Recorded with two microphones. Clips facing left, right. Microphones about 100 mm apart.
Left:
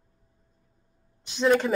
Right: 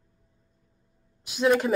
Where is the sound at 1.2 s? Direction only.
5° right (ahead or behind).